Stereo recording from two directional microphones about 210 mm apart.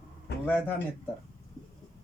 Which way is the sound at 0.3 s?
55° left (ahead or behind).